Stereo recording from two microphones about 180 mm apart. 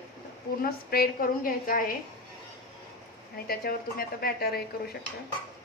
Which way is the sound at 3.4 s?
55° left (ahead or behind).